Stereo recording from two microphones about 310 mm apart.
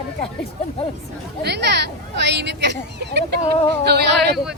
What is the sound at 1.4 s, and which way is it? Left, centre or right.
Speech, right.